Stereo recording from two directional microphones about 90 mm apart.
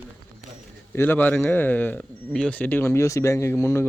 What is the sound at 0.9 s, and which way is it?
Speech, 20° left (ahead or behind).